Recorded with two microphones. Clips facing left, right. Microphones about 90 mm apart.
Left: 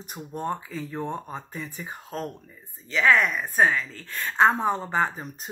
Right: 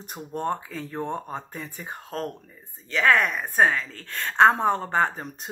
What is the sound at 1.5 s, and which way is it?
Speech, 50° right (ahead or behind).